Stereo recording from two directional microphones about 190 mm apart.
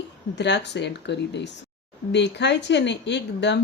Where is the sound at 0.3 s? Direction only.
65° left (ahead or behind).